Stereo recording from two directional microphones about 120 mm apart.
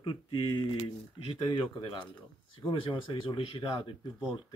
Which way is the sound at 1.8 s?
50° left (ahead or behind).